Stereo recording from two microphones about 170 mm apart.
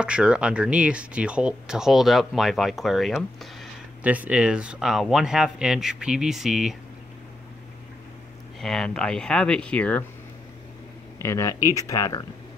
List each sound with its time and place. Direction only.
0.0 s speech: 5° right (ahead or behind)
8.5 s speech: centre (ahead or behind)
11.1 s speech: 15° left (ahead or behind)